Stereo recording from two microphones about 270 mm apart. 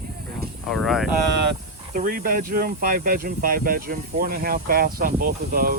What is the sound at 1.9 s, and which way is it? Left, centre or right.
Speech, right.